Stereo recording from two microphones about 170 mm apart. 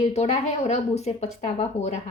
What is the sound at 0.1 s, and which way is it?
Speech, 40° left (ahead or behind).